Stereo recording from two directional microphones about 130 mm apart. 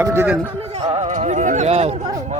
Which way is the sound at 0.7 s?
55° right (ahead or behind).